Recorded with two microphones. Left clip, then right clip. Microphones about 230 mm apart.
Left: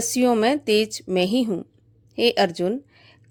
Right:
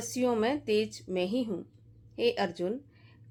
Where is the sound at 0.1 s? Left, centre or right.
Left.